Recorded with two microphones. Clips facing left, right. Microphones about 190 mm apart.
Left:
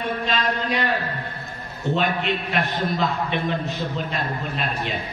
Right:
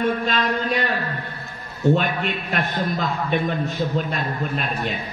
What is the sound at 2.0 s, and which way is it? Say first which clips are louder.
A man's voice: left 1 dB; 45° right (ahead or behind).